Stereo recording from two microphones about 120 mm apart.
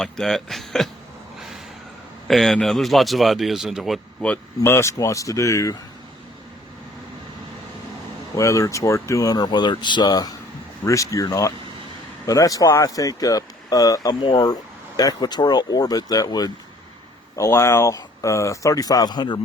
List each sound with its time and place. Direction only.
0.0 s speech: 5° left (ahead or behind)
2.2 s speech: centre (ahead or behind)
4.2 s speech: 15° left (ahead or behind)
8.4 s speech: 25° left (ahead or behind)